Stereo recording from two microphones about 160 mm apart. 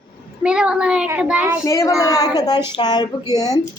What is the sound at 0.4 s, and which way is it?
Speech, 5° right (ahead or behind).